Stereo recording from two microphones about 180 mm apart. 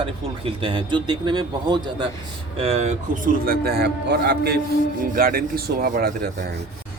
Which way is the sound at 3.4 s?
60° right (ahead or behind).